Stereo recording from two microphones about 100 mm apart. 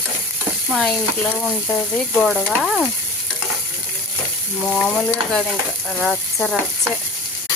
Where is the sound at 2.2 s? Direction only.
Centre (ahead or behind).